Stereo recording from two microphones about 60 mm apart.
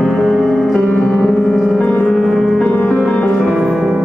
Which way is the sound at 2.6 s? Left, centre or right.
Left.